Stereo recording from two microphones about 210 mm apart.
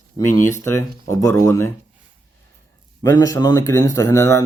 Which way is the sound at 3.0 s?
15° left (ahead or behind).